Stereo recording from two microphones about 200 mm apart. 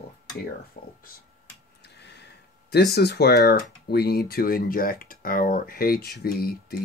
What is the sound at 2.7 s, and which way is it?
Speech, 55° left (ahead or behind).